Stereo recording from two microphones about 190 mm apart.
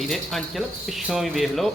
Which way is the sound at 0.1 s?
Centre (ahead or behind).